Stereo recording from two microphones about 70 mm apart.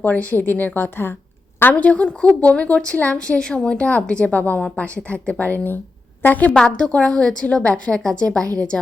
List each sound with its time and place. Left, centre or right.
0.0 s speech: left
1.7 s a woman's voice: centre